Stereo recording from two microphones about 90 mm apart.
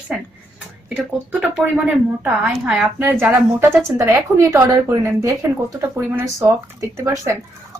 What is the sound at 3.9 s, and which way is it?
Speech, 25° right (ahead or behind).